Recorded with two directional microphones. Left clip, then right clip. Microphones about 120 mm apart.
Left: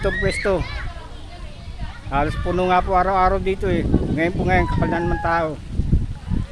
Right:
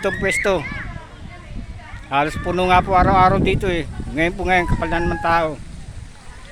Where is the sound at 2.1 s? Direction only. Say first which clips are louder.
Right 3 dB; 15° right (ahead or behind).